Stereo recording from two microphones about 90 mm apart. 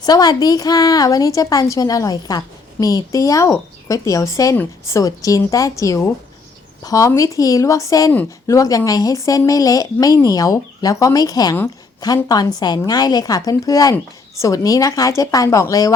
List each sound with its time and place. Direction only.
0.0 s a woman's voice: 50° left (ahead or behind)